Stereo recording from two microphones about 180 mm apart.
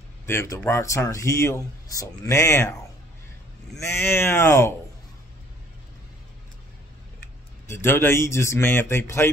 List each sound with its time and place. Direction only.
0.3 s speech: 15° left (ahead or behind)
3.8 s speech: 15° left (ahead or behind)
7.6 s speech: 15° left (ahead or behind)